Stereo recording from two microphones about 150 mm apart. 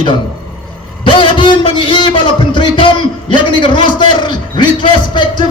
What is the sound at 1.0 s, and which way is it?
A man's voice, 30° left (ahead or behind).